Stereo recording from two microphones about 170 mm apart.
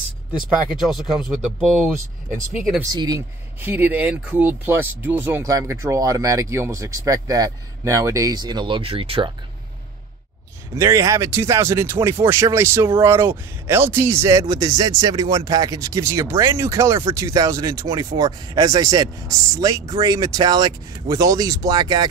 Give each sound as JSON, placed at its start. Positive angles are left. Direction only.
{"t": 0.3, "sound": "speech", "side_deg": -5}
{"t": 2.8, "sound": "speech", "side_deg": -20}
{"t": 10.7, "sound": "speech", "side_deg": -15}